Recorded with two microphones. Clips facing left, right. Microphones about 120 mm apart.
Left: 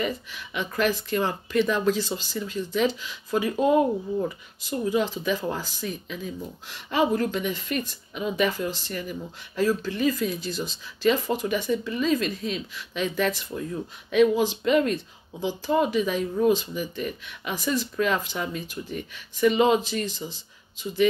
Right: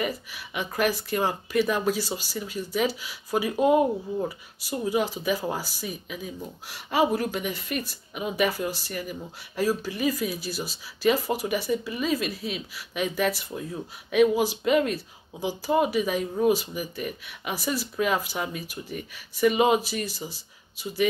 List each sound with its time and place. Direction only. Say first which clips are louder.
0.0 s speech: left 1 dB; 10° right (ahead or behind)